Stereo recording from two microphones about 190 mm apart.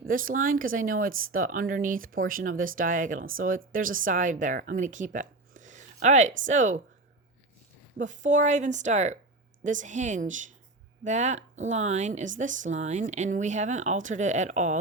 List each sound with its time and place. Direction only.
0.1 s speech: 45° right (ahead or behind)
7.9 s speech: 40° right (ahead or behind)